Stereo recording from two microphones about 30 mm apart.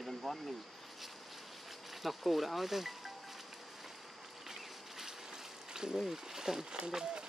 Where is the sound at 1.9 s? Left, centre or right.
Centre.